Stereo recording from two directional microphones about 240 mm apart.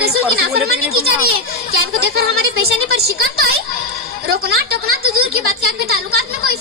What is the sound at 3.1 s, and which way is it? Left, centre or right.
Speech, right.